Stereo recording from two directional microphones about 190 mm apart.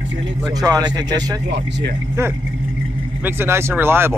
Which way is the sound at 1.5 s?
65° right (ahead or behind).